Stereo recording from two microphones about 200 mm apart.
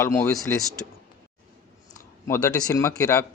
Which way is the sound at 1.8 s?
15° left (ahead or behind).